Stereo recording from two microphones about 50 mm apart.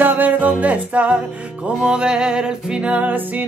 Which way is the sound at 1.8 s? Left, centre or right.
Centre.